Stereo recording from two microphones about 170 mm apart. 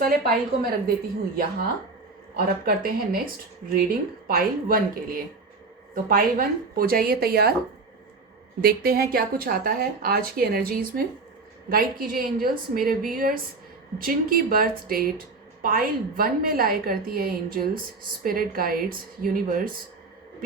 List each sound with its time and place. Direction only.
0.0 s speech: 60° right (ahead or behind)
2.3 s speech: 60° right (ahead or behind)
8.6 s speech: 60° right (ahead or behind)